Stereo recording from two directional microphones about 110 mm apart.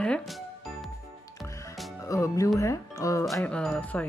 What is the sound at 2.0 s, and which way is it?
Speech, 30° left (ahead or behind).